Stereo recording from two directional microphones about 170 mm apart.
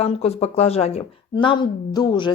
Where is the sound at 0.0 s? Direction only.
35° left (ahead or behind).